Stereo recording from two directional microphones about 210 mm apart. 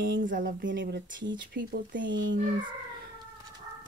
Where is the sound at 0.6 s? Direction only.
55° right (ahead or behind).